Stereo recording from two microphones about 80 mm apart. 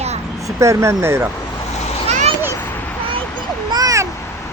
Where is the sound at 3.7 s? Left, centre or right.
Right.